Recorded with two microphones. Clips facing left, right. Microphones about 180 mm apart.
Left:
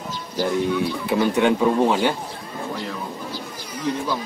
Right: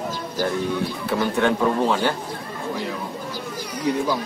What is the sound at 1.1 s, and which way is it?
Speech, 15° left (ahead or behind).